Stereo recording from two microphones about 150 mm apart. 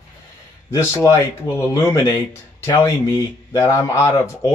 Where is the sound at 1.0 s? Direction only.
20° left (ahead or behind).